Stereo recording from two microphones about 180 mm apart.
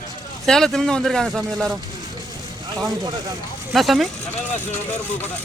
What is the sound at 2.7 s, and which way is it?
Speech, 20° right (ahead or behind).